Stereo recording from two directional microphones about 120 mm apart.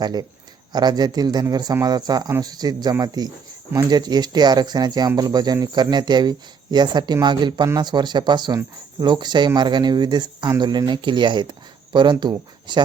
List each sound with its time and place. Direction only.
0.0 s speech: 35° right (ahead or behind)